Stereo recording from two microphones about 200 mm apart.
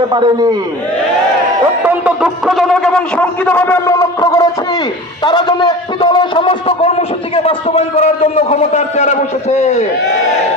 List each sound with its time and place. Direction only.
0.1 s a man's voice: 25° right (ahead or behind)
1.8 s a man's voice: 10° right (ahead or behind); by 9.8 s 35° left (ahead or behind)